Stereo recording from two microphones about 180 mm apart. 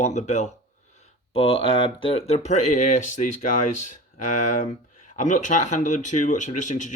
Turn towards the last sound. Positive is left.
turn(degrees=45)  # may be behind; listen again after turning